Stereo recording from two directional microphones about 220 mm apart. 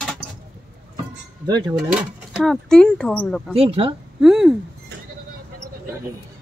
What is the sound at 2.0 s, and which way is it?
Speech, centre (ahead or behind).